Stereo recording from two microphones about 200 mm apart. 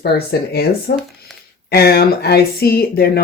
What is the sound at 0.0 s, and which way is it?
Speech, 55° left (ahead or behind).